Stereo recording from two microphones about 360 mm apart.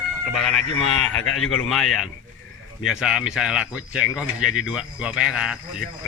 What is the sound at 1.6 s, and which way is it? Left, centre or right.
Speech, centre.